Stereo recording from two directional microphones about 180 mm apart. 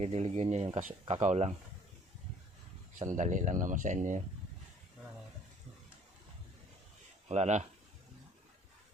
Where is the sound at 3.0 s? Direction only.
45° right (ahead or behind).